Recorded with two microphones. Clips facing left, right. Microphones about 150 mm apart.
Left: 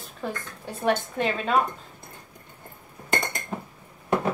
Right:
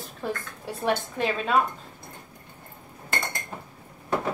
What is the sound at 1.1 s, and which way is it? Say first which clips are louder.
Speech: left 1 dB; centre (ahead or behind).